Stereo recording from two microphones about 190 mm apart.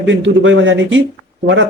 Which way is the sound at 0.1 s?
80° right.